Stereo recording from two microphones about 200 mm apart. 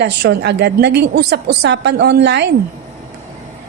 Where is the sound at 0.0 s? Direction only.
55° right (ahead or behind).